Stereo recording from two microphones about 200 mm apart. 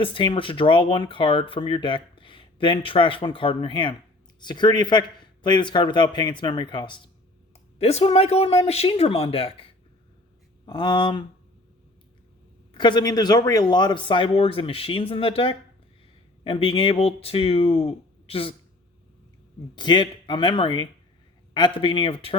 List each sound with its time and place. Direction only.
0.0 s speech: 25° left (ahead or behind)
12.7 s speech: 25° left (ahead or behind)
19.7 s speech: 25° left (ahead or behind)